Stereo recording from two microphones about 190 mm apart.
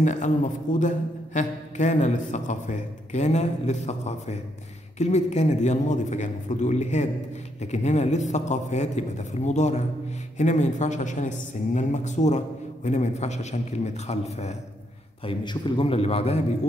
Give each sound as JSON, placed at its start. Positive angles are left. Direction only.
{"t": 0.0, "sound": "a man's voice", "side_deg": 40}
{"t": 15.2, "sound": "a man's voice", "side_deg": 25}